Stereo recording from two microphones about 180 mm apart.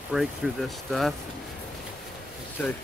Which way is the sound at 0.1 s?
Centre (ahead or behind).